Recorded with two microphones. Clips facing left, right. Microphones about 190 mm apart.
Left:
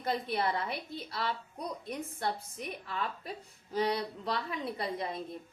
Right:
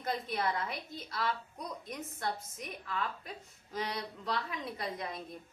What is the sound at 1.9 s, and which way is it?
A woman's voice, 30° left (ahead or behind).